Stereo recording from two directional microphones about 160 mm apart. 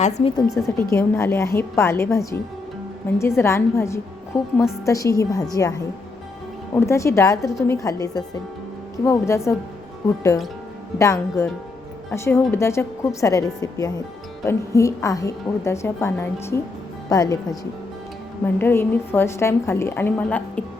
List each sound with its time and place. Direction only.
0.0 s a woman's voice: 45° left (ahead or behind)
0.8 s a woman's voice: 15° left (ahead or behind)
18.4 s a woman's voice: 15° left (ahead or behind)